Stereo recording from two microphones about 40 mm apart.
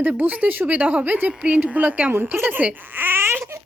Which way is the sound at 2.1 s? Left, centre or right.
Right.